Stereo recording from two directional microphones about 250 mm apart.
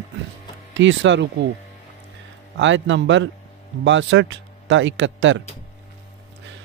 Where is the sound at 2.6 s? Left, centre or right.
Right.